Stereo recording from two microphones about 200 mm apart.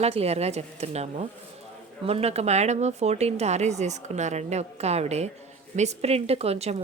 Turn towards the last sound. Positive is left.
turn(degrees=-30)  # may be behind; listen again after turning